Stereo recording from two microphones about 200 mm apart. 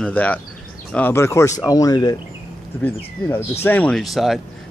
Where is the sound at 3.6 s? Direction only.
5° left (ahead or behind).